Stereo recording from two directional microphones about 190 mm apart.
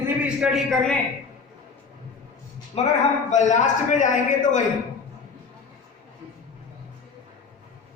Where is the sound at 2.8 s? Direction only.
30° left (ahead or behind).